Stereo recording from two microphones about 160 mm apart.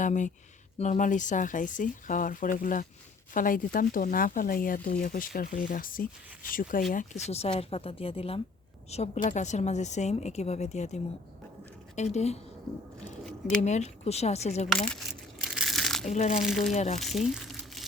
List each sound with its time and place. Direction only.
0.0 s a woman's voice: 50° left (ahead or behind)
13.6 s a woman's voice: 45° left (ahead or behind)
14.7 s speech: 5° left (ahead or behind)
15.4 s crushing: centre (ahead or behind)
16.0 s a woman's voice: 45° left (ahead or behind)
16.4 s speech: centre (ahead or behind)
16.7 s a woman's voice: 55° left (ahead or behind)
17.0 s crumpling: centre (ahead or behind)